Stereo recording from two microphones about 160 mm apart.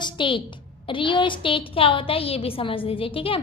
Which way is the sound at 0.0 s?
30° left (ahead or behind).